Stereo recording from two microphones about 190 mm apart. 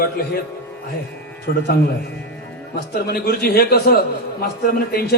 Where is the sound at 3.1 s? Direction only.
55° left (ahead or behind).